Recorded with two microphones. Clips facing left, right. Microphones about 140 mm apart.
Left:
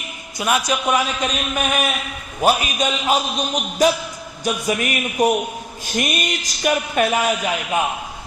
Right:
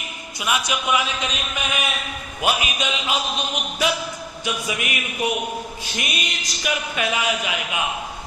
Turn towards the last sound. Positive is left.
turn(degrees=45)  # may be behind; listen again after turning